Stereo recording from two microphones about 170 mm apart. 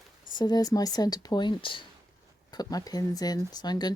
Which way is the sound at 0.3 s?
25° left (ahead or behind).